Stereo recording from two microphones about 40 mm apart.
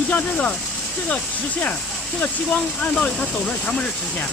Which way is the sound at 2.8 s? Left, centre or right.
Left.